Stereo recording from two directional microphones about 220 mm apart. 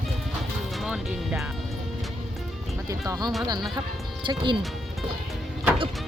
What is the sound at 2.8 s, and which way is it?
Music, 15° right (ahead or behind).